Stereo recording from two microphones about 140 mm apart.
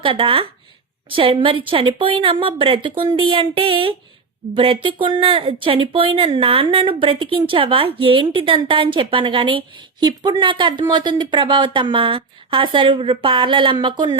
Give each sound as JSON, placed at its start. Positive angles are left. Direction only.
{"t": 0.0, "sound": "speech", "side_deg": -40}